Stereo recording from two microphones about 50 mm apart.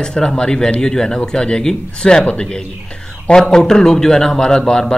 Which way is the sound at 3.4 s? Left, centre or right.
Centre.